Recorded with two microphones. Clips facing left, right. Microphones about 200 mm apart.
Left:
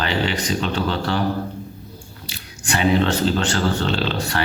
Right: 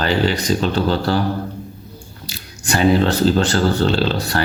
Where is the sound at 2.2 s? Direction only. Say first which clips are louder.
Right 3 dB; 40° right (ahead or behind).